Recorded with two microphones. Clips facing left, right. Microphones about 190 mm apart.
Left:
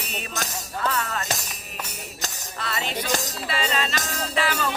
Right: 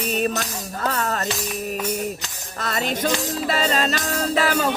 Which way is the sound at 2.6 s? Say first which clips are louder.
Right 6 dB; 45° right (ahead or behind).